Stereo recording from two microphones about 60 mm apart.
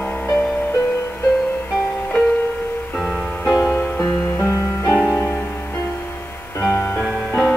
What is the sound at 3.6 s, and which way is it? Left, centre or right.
Music, left.